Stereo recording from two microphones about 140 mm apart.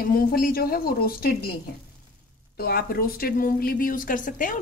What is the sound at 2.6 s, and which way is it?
A woman's voice, 90° left.